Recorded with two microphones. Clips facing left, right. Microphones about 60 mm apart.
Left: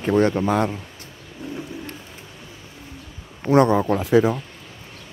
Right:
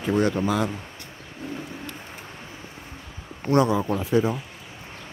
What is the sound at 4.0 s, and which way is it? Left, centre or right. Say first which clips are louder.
Speech: left 5 dB; left.